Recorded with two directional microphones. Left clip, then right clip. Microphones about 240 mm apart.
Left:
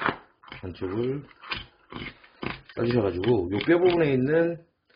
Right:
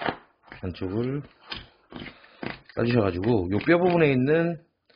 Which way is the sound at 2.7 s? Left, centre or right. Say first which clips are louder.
Right 1 dB; right.